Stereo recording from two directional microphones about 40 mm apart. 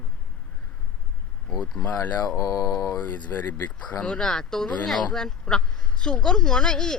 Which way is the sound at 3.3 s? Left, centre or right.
Left.